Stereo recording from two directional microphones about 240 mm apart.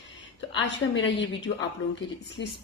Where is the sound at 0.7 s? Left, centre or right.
Left.